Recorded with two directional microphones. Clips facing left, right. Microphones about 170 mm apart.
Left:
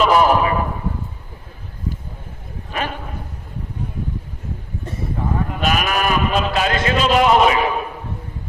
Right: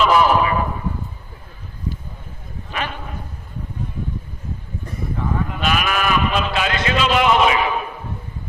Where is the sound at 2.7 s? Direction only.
40° left (ahead or behind).